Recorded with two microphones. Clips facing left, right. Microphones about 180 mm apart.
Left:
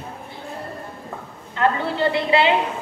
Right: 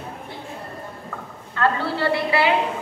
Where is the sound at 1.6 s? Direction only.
20° left (ahead or behind).